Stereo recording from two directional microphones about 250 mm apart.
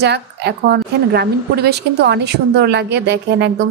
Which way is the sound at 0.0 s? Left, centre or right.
Right.